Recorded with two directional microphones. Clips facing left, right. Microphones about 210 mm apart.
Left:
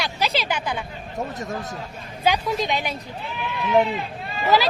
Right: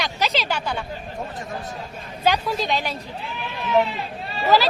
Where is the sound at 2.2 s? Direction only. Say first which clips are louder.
Even; 15° left (ahead or behind).